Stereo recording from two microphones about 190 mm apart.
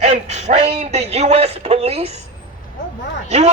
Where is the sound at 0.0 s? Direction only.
35° right (ahead or behind).